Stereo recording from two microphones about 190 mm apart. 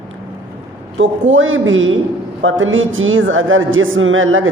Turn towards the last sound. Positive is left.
turn(degrees=-90)